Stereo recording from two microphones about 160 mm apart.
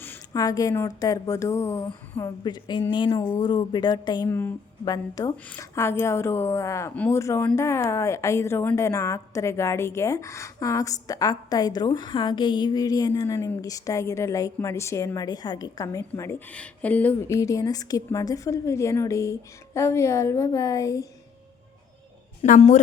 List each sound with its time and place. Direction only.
0.0 s a woman's voice: 20° left (ahead or behind)
4.3 s a woman's voice: 15° left (ahead or behind)
22.4 s a woman's voice: 50° left (ahead or behind)